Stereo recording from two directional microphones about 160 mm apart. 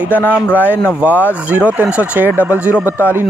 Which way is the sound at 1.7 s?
10° right (ahead or behind).